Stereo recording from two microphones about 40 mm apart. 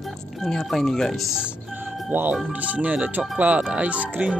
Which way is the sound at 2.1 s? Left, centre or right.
Right.